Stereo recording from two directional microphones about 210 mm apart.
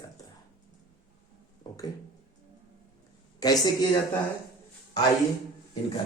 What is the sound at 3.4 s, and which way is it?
Speech, 15° left (ahead or behind).